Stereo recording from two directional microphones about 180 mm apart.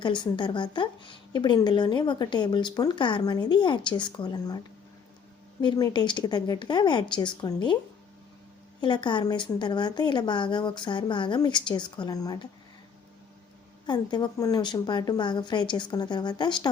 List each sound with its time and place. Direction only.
0.0 s speech: 25° left (ahead or behind)
5.6 s speech: 25° left (ahead or behind)
8.8 s speech: 25° left (ahead or behind)
13.8 s speech: 25° left (ahead or behind)